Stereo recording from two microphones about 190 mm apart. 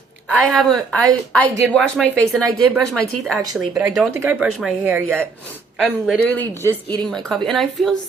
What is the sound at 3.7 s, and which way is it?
Speech, 15° right (ahead or behind).